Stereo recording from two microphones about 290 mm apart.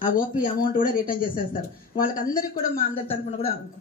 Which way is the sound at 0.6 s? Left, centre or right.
Left.